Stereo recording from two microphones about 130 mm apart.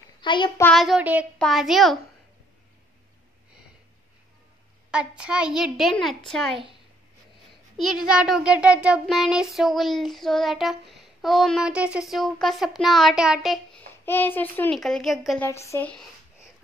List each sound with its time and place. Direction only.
0.2 s child singing: 40° left (ahead or behind)
0.7 s child singing: centre (ahead or behind)
4.9 s child singing: 5° right (ahead or behind)
7.7 s a child's voice: 5° right (ahead or behind)
9.0 s child singing: centre (ahead or behind)
13.7 s a child's voice: 15° left (ahead or behind)
14.7 s child singing: 5° left (ahead or behind)
15.3 s speech: 20° left (ahead or behind)